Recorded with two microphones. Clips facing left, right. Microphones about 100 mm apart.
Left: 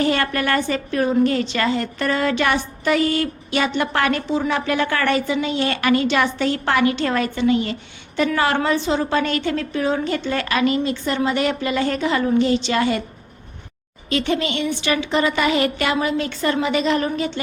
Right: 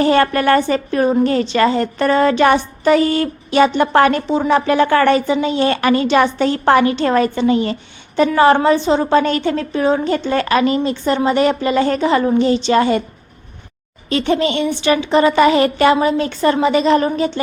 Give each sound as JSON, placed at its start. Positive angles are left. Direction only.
{"t": 0.0, "sound": "a woman's voice", "side_deg": -35}
{"t": 14.1, "sound": "a woman's voice", "side_deg": -35}